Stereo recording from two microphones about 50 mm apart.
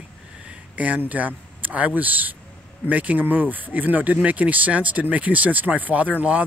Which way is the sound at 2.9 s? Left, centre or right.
Right.